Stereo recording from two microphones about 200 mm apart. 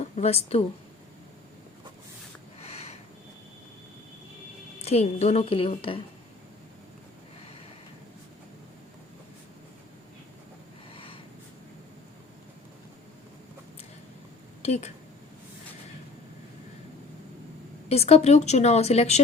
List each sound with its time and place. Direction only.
0.0 s speech: 30° left (ahead or behind)
2.6 s a sound: 30° left (ahead or behind)
4.8 s a woman's voice: 30° left (ahead or behind)
10.9 s snort: 25° left (ahead or behind)
14.6 s a woman's voice: 35° left (ahead or behind)
17.8 s a woman's voice: 30° left (ahead or behind)